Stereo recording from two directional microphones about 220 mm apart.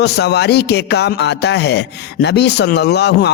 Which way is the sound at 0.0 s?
50° left (ahead or behind).